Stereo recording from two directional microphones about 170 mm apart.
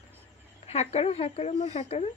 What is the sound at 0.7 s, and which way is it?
Speech, 40° left (ahead or behind).